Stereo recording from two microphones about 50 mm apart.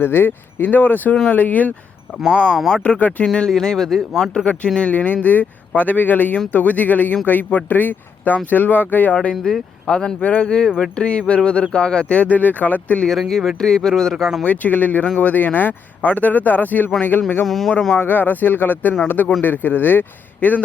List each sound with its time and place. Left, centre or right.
0.0 s speech: left
2.6 s speech: centre
2.8 s speech: left
3.3 s speech: centre
4.8 s speech: left
9.3 s speech: centre
10.2 s speech: left
10.4 s speech: centre; by 13.0 s left
13.1 s speech: centre
14.4 s speech: left
17.4 s speech: centre
17.9 s speech: left